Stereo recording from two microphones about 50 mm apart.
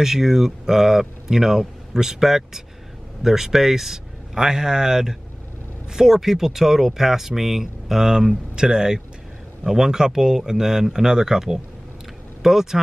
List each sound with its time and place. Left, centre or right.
0.0 s speech: centre